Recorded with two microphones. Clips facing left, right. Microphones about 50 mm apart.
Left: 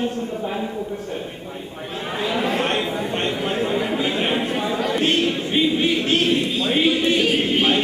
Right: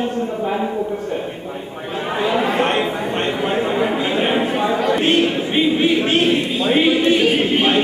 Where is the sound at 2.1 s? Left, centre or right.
Centre.